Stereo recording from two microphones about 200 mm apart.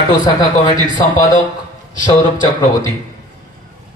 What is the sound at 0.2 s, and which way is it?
Speech, 20° left (ahead or behind).